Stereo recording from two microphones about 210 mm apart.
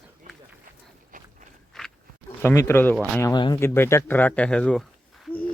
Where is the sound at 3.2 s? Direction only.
20° left (ahead or behind).